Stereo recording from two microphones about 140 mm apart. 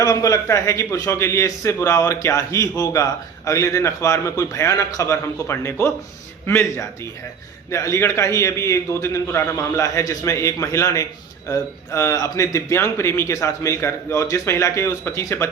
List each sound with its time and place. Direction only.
0.0 s a man's voice: 25° left (ahead or behind)